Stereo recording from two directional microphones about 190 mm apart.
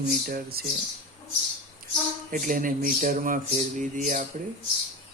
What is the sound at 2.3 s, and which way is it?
Speech, 45° right (ahead or behind).